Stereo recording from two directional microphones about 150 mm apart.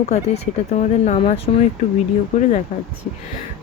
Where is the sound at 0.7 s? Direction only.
45° left (ahead or behind).